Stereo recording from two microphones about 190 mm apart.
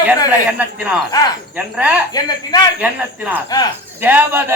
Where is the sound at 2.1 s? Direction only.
20° left (ahead or behind).